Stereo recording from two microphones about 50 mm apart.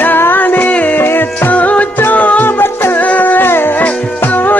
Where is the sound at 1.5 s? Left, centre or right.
Left.